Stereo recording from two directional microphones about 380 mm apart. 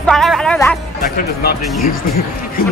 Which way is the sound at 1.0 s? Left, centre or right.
Left.